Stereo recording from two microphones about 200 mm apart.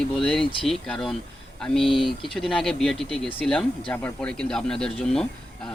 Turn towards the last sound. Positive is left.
turn(degrees=5)  # may be behind; listen again after turning